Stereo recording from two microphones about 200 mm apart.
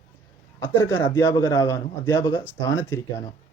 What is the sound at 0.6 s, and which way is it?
Speech, 10° left (ahead or behind).